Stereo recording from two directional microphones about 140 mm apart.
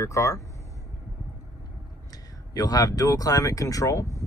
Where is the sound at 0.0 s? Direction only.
20° left (ahead or behind).